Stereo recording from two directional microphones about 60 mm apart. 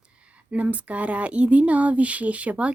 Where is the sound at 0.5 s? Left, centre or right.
Right.